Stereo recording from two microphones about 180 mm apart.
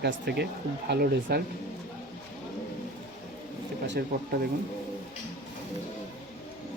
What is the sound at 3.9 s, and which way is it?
Speech, 60° right (ahead or behind).